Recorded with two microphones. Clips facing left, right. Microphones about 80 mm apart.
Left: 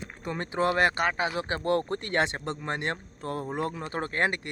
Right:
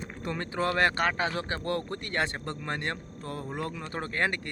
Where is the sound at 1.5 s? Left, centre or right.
Left.